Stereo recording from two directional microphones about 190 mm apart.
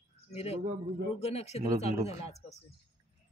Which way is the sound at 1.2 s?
35° left (ahead or behind).